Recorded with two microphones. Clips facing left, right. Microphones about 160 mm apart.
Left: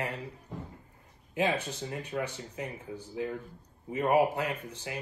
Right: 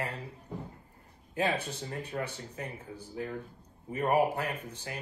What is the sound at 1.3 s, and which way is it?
Speech, 15° left (ahead or behind).